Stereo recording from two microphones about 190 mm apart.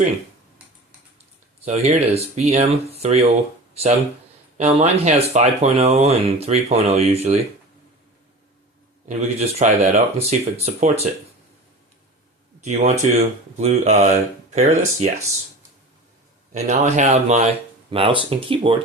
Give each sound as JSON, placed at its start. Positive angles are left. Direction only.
{"t": 1.6, "sound": "speech", "side_deg": -35}
{"t": 4.5, "sound": "speech", "side_deg": -35}
{"t": 9.0, "sound": "speech", "side_deg": -40}
{"t": 12.6, "sound": "speech", "side_deg": -35}
{"t": 16.5, "sound": "speech", "side_deg": -40}